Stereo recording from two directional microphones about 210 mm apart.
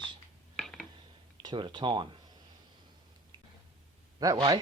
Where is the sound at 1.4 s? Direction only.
20° right (ahead or behind).